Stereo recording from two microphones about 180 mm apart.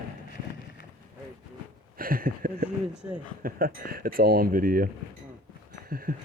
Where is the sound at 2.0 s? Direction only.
55° right (ahead or behind).